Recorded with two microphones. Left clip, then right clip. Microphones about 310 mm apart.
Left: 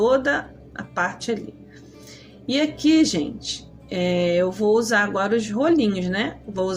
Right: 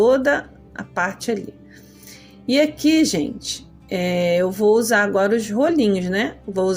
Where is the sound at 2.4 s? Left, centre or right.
Right.